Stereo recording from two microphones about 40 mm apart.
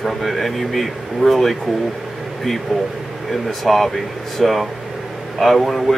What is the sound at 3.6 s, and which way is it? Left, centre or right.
Speech, centre.